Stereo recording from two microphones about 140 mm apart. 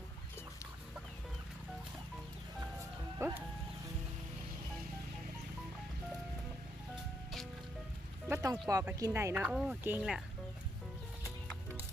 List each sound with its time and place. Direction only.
3.2 s music: 15° right (ahead or behind)
8.3 s a sound: 25° right (ahead or behind)
9.0 s speech: 25° right (ahead or behind)